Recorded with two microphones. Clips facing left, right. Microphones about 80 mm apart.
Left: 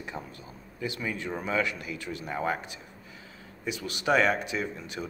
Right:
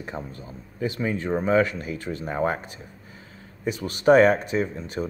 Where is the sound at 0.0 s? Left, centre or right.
Right.